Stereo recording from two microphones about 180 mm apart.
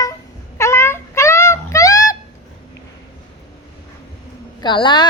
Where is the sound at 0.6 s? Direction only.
15° left (ahead or behind).